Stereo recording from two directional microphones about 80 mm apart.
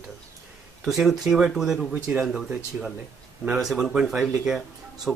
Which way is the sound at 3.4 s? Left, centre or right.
Centre.